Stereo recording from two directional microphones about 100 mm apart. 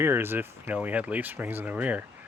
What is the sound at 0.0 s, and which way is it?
Speech, 25° right (ahead or behind).